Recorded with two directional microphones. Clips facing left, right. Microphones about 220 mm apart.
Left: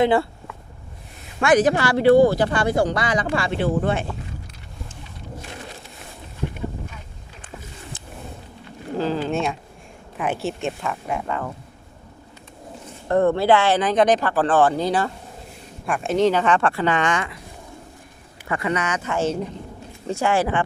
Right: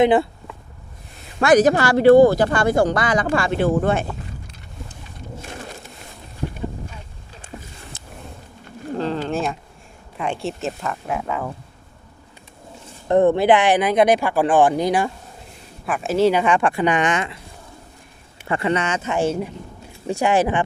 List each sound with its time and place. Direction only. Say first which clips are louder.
0.0 s speech: right 3 dB; 20° right (ahead or behind)
1.4 s speech: right 3 dB; 40° right (ahead or behind)
9.0 s speech: left 1 dB; centre (ahead or behind)
13.1 s speech: right 2 dB; 20° right (ahead or behind)
18.4 s speech: right 3 dB; 30° right (ahead or behind)